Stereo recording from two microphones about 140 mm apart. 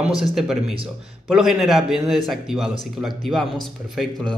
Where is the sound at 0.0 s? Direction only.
5° right (ahead or behind).